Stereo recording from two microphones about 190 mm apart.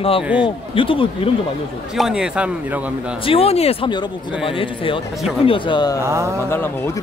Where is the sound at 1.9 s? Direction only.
5° right (ahead or behind).